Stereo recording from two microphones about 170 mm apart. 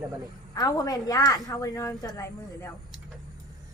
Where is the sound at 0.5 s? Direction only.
20° left (ahead or behind).